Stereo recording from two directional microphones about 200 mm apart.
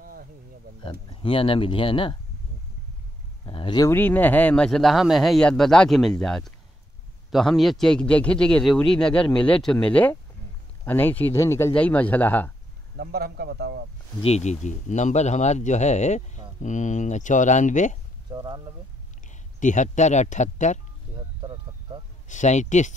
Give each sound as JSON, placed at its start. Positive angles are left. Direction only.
{"t": 0.0, "sound": "insect", "side_deg": -45}
{"t": 1.1, "sound": "speech", "side_deg": 25}
{"t": 3.4, "sound": "speech", "side_deg": 25}
{"t": 12.9, "sound": "speech", "side_deg": -50}
{"t": 14.2, "sound": "speech", "side_deg": 35}
{"t": 18.3, "sound": "speech", "side_deg": -20}
{"t": 19.2, "sound": "speech", "side_deg": 40}
{"t": 21.4, "sound": "a sound", "side_deg": -25}
{"t": 22.3, "sound": "speech", "side_deg": 35}